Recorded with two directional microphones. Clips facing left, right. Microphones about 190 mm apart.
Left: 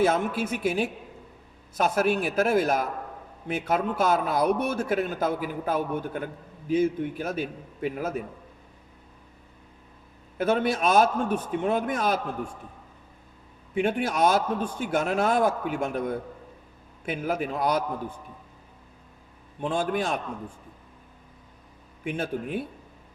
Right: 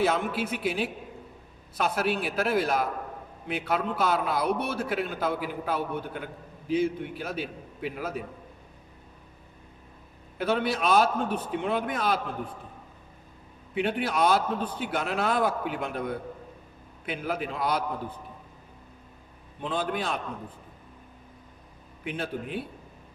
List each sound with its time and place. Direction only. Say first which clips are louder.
0.0 s a man's voice: left 3 dB; 45° left (ahead or behind)
10.3 s a man's voice: left 3 dB; 45° left (ahead or behind)
13.7 s a man's voice: left 2 dB; 45° left (ahead or behind)
19.6 s a man's voice: left 3 dB; 50° left (ahead or behind)
22.0 s a man's voice: left 3 dB; 45° left (ahead or behind)